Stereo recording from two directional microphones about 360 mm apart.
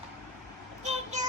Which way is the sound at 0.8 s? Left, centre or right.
Centre.